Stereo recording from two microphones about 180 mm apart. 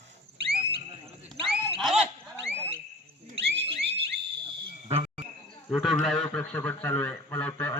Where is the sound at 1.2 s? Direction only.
Centre (ahead or behind).